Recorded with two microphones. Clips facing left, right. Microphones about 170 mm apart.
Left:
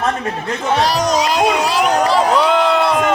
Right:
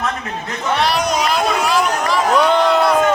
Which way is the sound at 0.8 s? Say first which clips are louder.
Left 1 dB; 40° left (ahead or behind).